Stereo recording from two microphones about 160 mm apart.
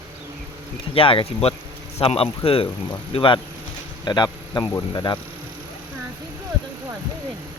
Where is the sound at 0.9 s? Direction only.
35° left (ahead or behind).